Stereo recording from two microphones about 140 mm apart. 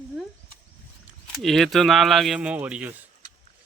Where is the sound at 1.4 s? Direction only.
Centre (ahead or behind).